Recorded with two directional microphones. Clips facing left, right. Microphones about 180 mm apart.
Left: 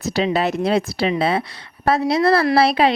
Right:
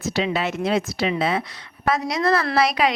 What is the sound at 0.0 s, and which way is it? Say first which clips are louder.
Speech: left 4 dB; 35° left (ahead or behind).